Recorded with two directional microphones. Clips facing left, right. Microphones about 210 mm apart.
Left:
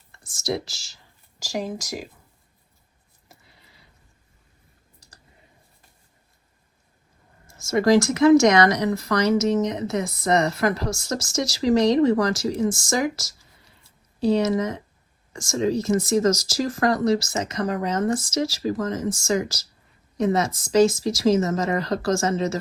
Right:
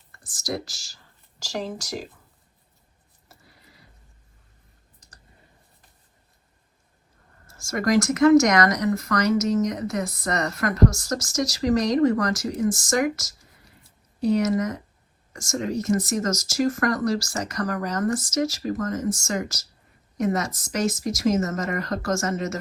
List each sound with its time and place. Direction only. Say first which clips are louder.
0.1 s speech: left 3 dB; 25° left (ahead or behind)
1.5 s speech: left 2 dB; 10° left (ahead or behind)
3.2 s a sound: even; 25° left (ahead or behind)
7.4 s a woman's voice: left 5 dB; 20° left (ahead or behind)